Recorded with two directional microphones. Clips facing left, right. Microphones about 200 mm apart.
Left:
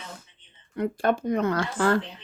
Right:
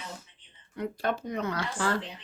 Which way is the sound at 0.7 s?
55° left (ahead or behind).